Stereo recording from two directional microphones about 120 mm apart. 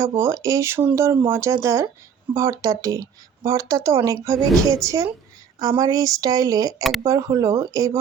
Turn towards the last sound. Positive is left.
turn(degrees=-25)  # may be behind; listen again after turning